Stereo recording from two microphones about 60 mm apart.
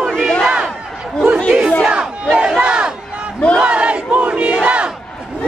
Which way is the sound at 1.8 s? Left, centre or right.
Centre.